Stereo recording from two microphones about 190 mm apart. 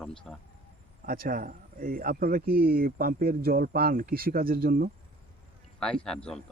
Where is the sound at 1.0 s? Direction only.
50° right (ahead or behind).